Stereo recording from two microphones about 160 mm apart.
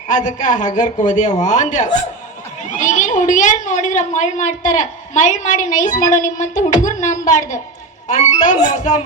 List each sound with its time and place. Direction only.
0.1 s a woman's voice: 50° left (ahead or behind)